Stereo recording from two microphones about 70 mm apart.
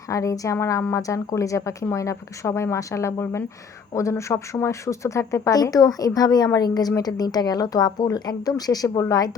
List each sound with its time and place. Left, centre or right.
0.1 s speech: left
5.5 s a woman's voice: left